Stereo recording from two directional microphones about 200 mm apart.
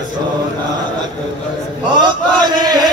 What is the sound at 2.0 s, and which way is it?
Chant, 20° right (ahead or behind).